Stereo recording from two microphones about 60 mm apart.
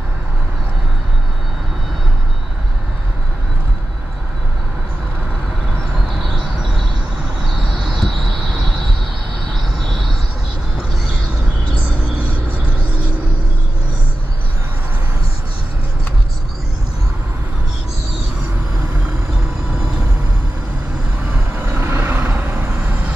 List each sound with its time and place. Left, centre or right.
6.2 s a sound: centre
7.7 s vehicle: centre
21.7 s vehicle: right